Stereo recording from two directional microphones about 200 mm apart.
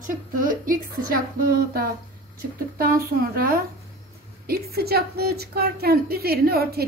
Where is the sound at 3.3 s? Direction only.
45° right (ahead or behind).